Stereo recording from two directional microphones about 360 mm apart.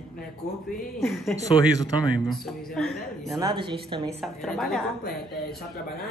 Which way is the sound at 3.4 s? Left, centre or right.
Centre.